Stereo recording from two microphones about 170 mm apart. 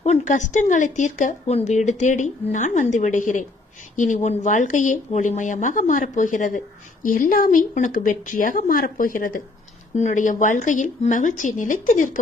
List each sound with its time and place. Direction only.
0.0 s speech: 45° left (ahead or behind)